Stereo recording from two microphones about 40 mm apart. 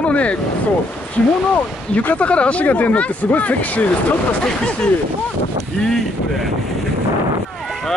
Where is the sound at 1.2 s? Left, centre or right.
Left.